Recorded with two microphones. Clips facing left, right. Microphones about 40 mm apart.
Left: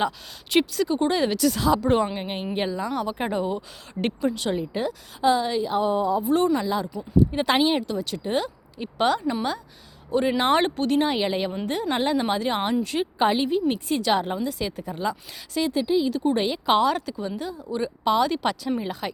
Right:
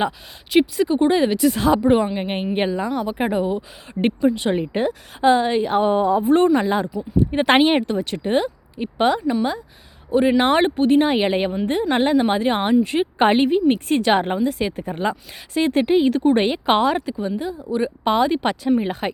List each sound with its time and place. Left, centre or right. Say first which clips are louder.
0.6 s speech: right 5 dB; centre
1.5 s speech: right 4 dB; right
2.9 s speech: right 4 dB; centre
4.4 s speech: right 5 dB; right
8.8 s speech: right 4 dB; right
13.1 s speech: right 6 dB; right
15.7 s speech: right 7 dB; right